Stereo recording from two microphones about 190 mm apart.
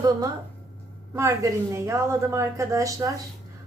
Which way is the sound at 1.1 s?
15° right (ahead or behind).